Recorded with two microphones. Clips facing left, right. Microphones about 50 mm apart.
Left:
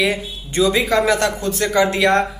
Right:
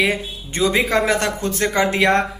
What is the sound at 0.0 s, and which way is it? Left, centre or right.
A man's voice, right.